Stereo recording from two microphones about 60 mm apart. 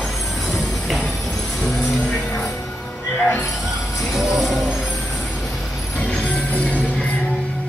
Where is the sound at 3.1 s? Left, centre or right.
Left.